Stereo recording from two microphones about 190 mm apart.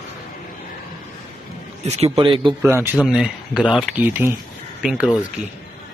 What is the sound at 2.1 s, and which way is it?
Speech, 25° right (ahead or behind).